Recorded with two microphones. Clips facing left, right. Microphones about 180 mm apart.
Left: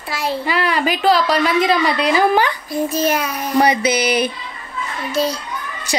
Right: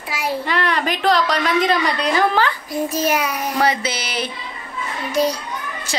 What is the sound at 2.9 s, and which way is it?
Speech, 10° right (ahead or behind).